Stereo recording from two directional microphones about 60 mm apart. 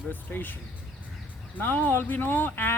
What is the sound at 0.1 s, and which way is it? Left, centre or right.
Speech, left.